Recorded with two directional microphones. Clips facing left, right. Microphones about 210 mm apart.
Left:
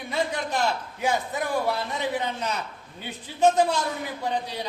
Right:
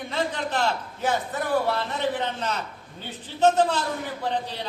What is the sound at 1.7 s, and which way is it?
A man's voice, 10° left (ahead or behind).